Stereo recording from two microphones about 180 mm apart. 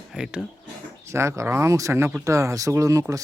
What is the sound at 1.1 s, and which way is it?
Speech, 15° right (ahead or behind).